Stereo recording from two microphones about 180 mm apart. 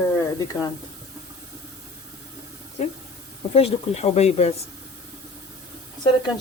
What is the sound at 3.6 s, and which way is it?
Speech, 35° left (ahead or behind).